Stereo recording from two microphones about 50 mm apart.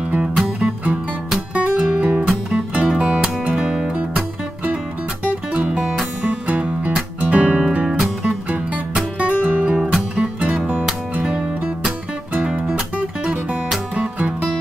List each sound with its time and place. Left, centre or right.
0.6 s music: right
5.2 s music: right
8.0 s music: centre
9.2 s music: right
12.4 s music: centre